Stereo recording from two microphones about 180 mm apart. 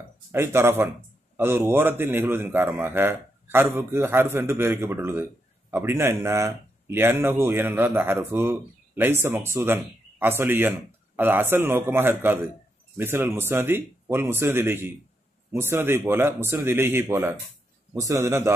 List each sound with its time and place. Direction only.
0.3 s a man's voice: 15° right (ahead or behind)